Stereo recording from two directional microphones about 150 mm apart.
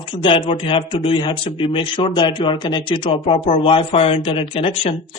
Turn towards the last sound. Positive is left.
turn(degrees=40)  # may be behind; listen again after turning